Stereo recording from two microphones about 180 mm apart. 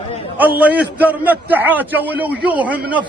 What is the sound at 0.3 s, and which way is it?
A man's voice, 10° right (ahead or behind).